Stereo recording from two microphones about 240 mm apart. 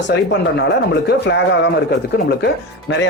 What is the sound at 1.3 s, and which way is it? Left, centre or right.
Speech, left.